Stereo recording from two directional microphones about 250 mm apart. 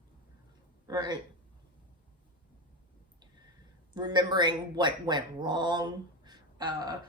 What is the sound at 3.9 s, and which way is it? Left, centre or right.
A woman's voice, centre.